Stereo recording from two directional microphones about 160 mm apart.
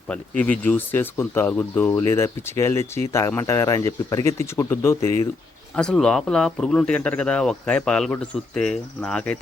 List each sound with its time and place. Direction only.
0.1 s speech: 10° left (ahead or behind)
5.7 s speech: 5° left (ahead or behind)